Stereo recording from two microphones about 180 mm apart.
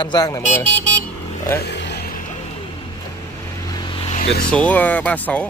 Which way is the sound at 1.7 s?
70° left (ahead or behind).